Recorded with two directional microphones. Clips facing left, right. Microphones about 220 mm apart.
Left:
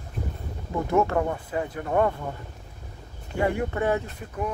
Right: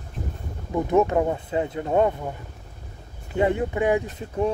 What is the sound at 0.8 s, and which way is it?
Speech, 20° right (ahead or behind).